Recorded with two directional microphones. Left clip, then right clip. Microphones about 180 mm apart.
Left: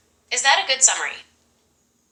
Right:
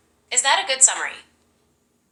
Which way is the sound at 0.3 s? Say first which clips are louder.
Left 2 dB; 15° left (ahead or behind).